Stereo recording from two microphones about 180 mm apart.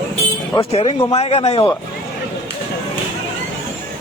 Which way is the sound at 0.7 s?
35° left (ahead or behind).